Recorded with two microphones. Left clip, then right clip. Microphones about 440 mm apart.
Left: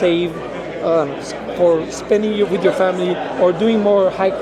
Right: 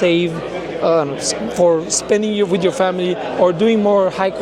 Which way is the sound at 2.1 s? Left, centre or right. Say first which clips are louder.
Left 1 dB; right.